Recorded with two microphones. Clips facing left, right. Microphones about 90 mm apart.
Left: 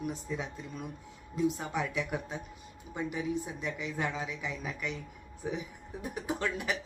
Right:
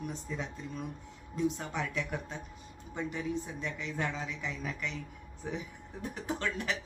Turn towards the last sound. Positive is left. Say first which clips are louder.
# left 1 dB
turn(degrees=10)  # may be behind; listen again after turning